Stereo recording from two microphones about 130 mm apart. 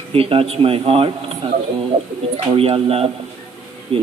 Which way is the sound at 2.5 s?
45° right (ahead or behind).